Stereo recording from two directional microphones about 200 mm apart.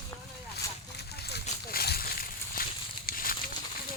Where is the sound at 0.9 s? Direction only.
55° left (ahead or behind).